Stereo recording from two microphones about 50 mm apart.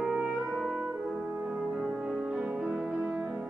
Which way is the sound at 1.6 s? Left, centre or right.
Centre.